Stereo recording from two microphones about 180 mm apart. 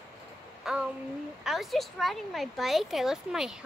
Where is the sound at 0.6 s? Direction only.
Centre (ahead or behind).